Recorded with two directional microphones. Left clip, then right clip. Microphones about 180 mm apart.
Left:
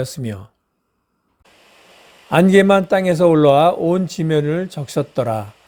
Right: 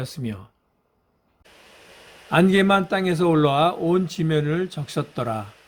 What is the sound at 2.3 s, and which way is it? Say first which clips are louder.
Speech: left 6 dB; 35° left (ahead or behind).